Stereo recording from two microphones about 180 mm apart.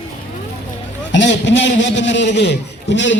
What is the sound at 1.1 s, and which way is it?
A man's voice, 80° left.